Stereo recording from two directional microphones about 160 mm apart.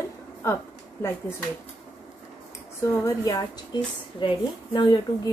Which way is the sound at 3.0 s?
20° left (ahead or behind).